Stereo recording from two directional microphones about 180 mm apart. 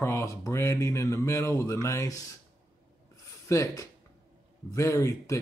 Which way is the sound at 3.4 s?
15° left (ahead or behind).